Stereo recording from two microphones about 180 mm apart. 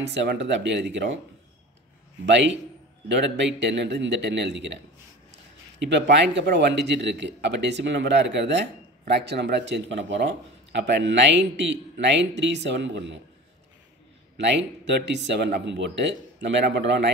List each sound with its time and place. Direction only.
0.1 s speech: 80° right
2.2 s speech: 75° right (ahead or behind)
5.8 s speech: 75° right (ahead or behind)
14.3 s speech: 75° right (ahead or behind)